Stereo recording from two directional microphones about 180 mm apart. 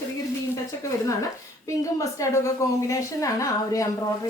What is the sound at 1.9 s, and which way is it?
A woman's voice, 15° left (ahead or behind).